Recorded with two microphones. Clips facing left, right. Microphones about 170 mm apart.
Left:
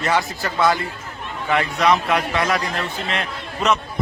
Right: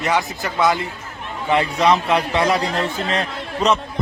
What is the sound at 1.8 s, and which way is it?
A man's voice, 30° right (ahead or behind).